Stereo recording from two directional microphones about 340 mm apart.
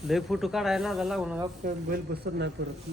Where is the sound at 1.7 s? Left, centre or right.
Right.